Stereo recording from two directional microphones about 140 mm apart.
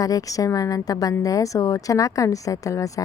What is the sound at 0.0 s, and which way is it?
A woman's voice, 25° left (ahead or behind).